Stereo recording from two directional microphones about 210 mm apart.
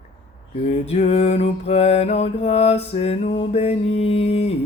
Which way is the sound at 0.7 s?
30° left (ahead or behind).